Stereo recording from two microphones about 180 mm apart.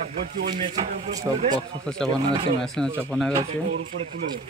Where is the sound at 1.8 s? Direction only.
5° left (ahead or behind).